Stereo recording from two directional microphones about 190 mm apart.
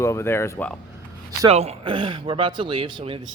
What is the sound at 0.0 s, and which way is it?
Speech, 15° left (ahead or behind).